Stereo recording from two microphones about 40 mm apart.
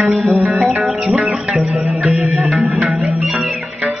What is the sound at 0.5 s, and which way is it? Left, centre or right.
Music, centre.